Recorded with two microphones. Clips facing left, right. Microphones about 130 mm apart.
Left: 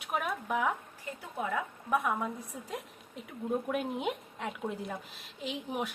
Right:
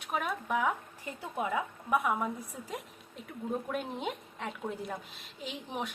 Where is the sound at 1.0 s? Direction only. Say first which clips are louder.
Right 2 dB; 15° right (ahead or behind).